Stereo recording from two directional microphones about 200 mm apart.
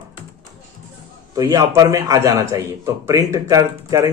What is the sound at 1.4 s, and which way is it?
A man's voice, 15° right (ahead or behind).